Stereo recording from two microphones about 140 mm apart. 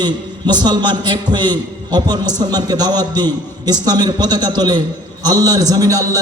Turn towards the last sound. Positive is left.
turn(degrees=-25)  # may be behind; listen again after turning